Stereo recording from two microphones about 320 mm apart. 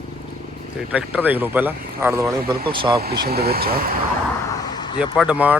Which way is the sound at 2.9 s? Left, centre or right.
Right.